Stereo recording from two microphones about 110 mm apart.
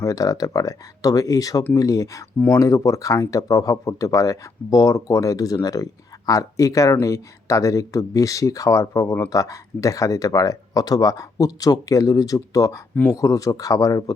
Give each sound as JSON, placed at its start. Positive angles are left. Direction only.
{"t": 0.0, "sound": "speech", "side_deg": 35}